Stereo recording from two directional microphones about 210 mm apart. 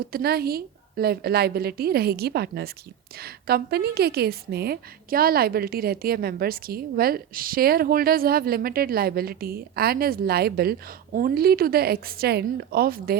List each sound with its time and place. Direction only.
0.0 s a woman's voice: 45° right (ahead or behind)